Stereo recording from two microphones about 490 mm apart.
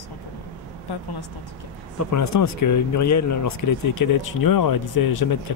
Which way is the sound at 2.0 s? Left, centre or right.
Left.